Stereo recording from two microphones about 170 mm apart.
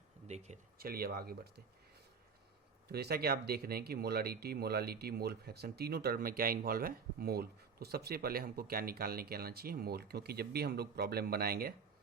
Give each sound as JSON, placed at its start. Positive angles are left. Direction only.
{"t": 0.3, "sound": "speech", "side_deg": -40}
{"t": 0.8, "sound": "speech", "side_deg": -65}
{"t": 2.9, "sound": "speech", "side_deg": -65}